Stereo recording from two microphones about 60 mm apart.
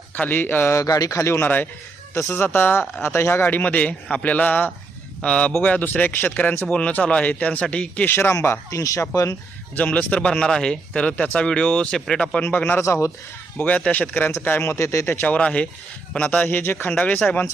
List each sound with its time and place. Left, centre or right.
0.1 s a man's voice: left
0.8 s speech: left
1.4 s speech: left
2.1 s speech: left
3.0 s speech: left
3.4 s speech: left
8.0 s speech: left
9.7 s speech: left
12.4 s a man's voice: left
12.8 s speech: left
13.6 s speech: left
14.6 s speech: left
15.3 s a man's voice: left
16.9 s speech: left